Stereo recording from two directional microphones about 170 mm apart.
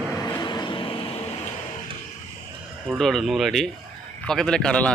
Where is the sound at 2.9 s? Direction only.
Centre (ahead or behind).